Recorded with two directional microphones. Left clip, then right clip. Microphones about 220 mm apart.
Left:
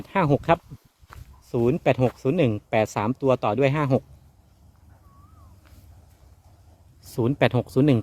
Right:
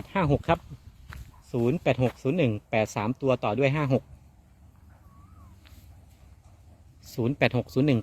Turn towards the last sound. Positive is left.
turn(degrees=10)  # may be behind; listen again after turning